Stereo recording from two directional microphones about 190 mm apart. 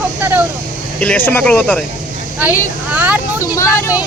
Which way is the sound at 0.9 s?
10° left (ahead or behind).